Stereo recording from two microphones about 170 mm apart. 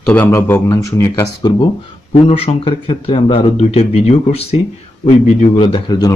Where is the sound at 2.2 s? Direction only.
35° left (ahead or behind).